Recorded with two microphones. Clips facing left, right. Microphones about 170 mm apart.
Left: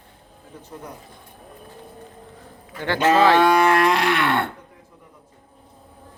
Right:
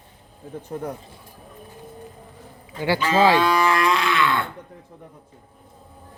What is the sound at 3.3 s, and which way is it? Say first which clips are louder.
Livestock: left 3 dB; 65° left (ahead or behind).